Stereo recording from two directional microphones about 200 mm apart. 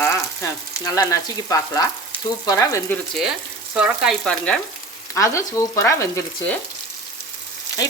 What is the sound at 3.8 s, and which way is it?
Frying, 5° right (ahead or behind).